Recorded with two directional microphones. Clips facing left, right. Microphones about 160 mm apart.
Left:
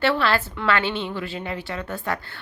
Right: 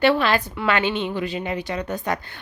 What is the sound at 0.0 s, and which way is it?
Speech, 15° right (ahead or behind).